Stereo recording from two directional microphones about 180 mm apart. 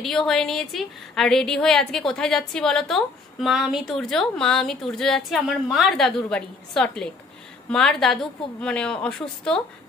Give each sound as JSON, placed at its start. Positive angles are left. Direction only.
{"t": 0.0, "sound": "a woman's voice", "side_deg": 5}